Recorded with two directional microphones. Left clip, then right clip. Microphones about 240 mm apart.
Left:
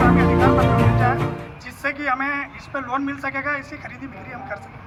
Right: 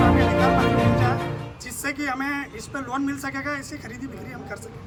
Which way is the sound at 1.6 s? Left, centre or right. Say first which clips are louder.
Left 5 dB; centre.